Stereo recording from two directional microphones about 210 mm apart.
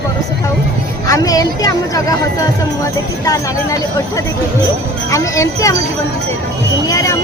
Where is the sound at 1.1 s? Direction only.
15° left (ahead or behind).